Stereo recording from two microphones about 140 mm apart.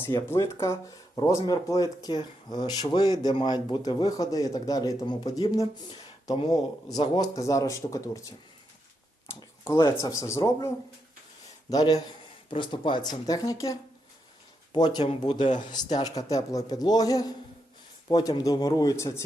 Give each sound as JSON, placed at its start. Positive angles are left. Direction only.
{"t": 0.3, "sound": "speech", "side_deg": 20}
{"t": 9.2, "sound": "a sound", "side_deg": 20}
{"t": 9.8, "sound": "speech", "side_deg": 25}
{"t": 11.7, "sound": "speech", "side_deg": 25}